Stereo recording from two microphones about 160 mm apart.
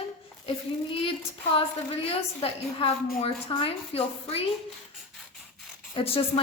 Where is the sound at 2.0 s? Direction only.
40° left (ahead or behind).